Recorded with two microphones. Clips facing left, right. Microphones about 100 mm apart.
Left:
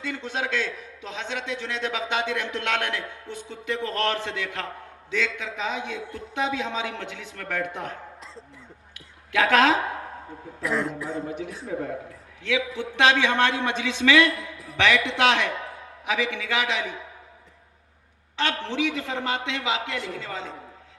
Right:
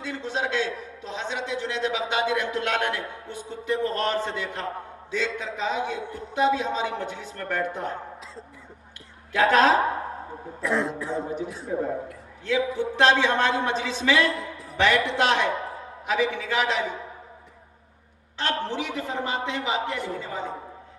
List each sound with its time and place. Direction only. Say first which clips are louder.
0.1 s a man's voice: right 1 dB; 65° left (ahead or behind)
6.1 s a man's voice: right 5 dB; 90° left
9.3 s a man's voice: right 1 dB; 90° left
10.6 s speech: right 1 dB; centre (ahead or behind)
11.3 s a man's voice: right 2 dB; 90° left
14.3 s a sound: right 3 dB; centre (ahead or behind)
14.8 s a man's voice: even; 90° left
16.0 s a man's voice: right 2 dB; 90° left
18.3 s a man's voice: left 1 dB; 90° left